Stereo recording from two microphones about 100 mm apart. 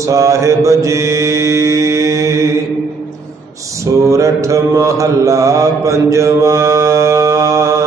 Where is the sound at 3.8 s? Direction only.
35° right (ahead or behind).